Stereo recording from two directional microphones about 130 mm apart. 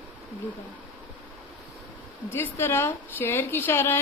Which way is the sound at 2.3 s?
15° left (ahead or behind).